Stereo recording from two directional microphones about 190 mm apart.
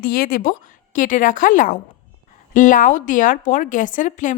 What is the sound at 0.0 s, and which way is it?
A woman's voice, 50° left (ahead or behind).